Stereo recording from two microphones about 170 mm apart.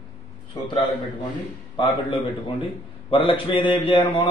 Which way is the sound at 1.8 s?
30° left (ahead or behind).